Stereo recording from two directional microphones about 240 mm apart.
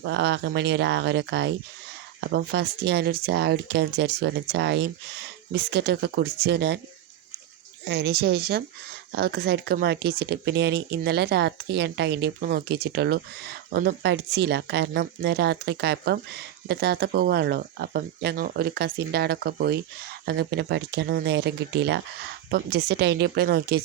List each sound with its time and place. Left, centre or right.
0.0 s speech: right
7.9 s speech: right